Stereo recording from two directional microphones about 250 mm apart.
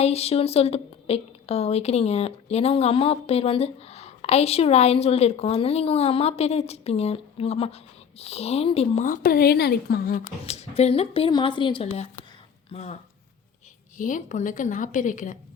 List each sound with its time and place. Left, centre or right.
0.0 s a woman's voice: left